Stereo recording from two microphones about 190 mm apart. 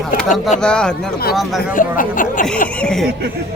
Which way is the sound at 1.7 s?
45° left (ahead or behind).